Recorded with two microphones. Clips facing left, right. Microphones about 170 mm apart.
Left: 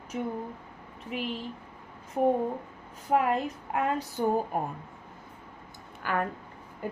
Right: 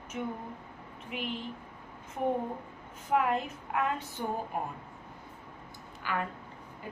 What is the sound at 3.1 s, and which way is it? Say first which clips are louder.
A woman's voice: left 3 dB; 40° left (ahead or behind).